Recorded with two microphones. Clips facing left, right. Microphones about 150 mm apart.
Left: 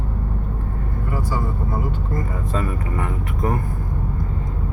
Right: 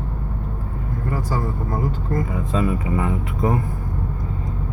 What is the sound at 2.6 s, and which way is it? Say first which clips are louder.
Speech: right 4 dB; 20° right (ahead or behind).